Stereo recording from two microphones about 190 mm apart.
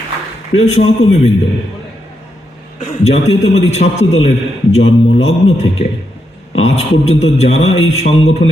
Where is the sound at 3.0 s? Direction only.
35° left (ahead or behind).